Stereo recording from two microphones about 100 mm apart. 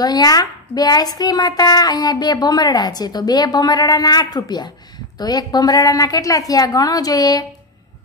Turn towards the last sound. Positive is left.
turn(degrees=40)  # may be behind; listen again after turning